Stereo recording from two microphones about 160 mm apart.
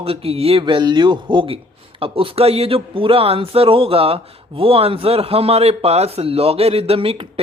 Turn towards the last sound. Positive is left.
turn(degrees=-35)  # may be behind; listen again after turning